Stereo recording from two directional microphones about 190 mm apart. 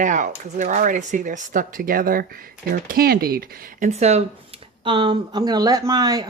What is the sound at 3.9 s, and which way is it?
Speech, 35° right (ahead or behind).